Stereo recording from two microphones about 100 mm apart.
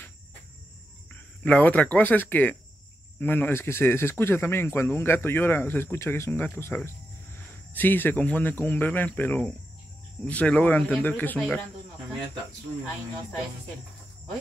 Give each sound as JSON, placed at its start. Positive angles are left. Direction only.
{"t": 1.4, "sound": "speech", "side_deg": 15}